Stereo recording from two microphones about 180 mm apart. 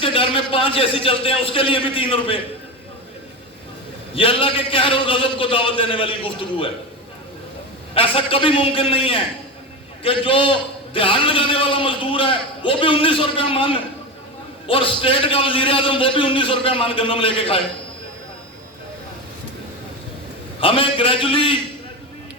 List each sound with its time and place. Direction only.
0.0 s a man's voice: 30° left (ahead or behind)
4.1 s a man's voice: 30° left (ahead or behind)
7.9 s a man's voice: 30° left (ahead or behind)
20.6 s a man's voice: 30° left (ahead or behind)